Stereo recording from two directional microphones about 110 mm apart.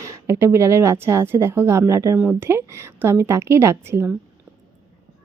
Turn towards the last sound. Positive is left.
turn(degrees=-25)  # may be behind; listen again after turning